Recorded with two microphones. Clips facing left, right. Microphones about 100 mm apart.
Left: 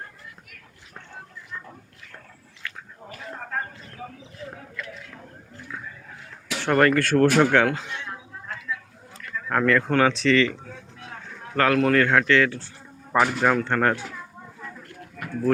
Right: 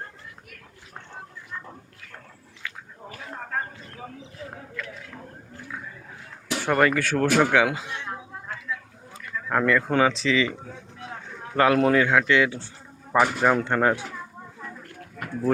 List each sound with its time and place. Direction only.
2.6 s chewing: 10° right (ahead or behind)
6.6 s speech: 5° right (ahead or behind)
9.1 s speech: 10° right (ahead or behind)